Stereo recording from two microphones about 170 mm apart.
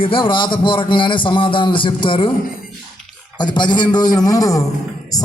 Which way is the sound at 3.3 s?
25° left (ahead or behind).